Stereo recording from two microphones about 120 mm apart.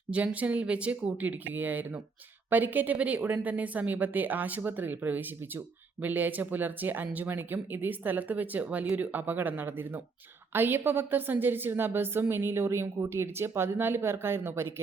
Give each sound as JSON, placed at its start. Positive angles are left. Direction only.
{"t": 0.1, "sound": "a woman's voice", "side_deg": -10}